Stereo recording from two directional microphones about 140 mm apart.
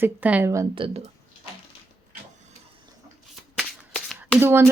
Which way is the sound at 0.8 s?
35° right (ahead or behind).